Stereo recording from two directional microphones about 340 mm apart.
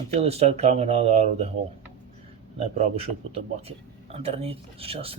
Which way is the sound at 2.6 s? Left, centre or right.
Centre.